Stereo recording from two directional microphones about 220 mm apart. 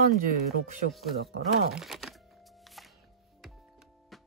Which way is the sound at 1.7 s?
Centre (ahead or behind).